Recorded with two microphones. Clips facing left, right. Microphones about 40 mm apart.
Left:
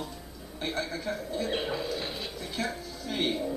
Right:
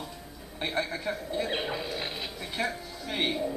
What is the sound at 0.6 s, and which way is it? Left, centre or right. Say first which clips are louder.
Speech: right 2 dB; right.